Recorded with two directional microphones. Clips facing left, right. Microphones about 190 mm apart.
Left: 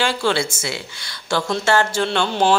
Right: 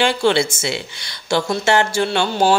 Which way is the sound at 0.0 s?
20° right (ahead or behind).